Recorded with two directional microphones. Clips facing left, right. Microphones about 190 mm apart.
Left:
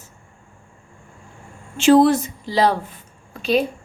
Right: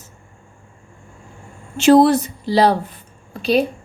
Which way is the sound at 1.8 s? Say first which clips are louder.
Right 2 dB; 40° right (ahead or behind).